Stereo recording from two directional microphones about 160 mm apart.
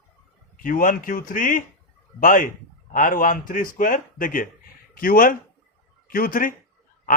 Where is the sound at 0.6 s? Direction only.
55° left (ahead or behind).